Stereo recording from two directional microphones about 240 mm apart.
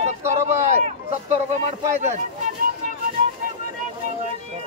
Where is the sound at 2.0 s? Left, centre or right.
Right.